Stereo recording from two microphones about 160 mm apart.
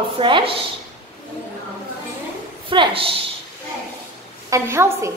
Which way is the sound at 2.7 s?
35° right (ahead or behind).